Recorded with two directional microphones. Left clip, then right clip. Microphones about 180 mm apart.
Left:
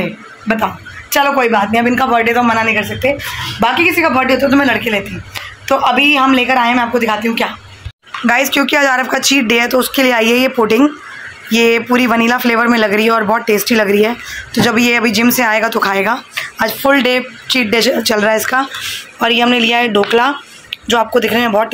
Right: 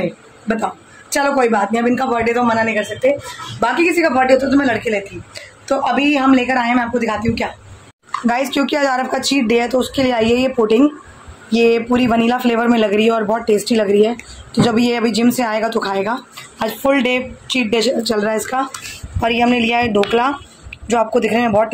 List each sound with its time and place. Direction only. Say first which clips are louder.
1.1 s a man's voice: left 3 dB; centre (ahead or behind)